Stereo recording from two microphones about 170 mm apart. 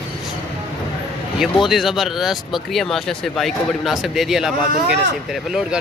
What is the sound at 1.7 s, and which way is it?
Speech, centre (ahead or behind).